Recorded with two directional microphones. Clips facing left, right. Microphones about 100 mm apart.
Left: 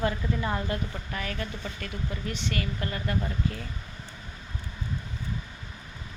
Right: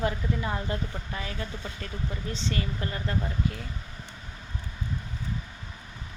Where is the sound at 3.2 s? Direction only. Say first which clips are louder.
Even; 5° right (ahead or behind).